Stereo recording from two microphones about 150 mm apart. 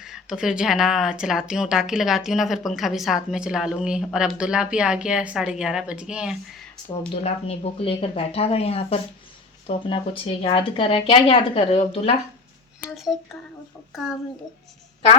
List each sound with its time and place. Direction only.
0.0 s speech: 5° right (ahead or behind)
7.1 s speech: 45° left (ahead or behind)
13.1 s speech: 5° left (ahead or behind)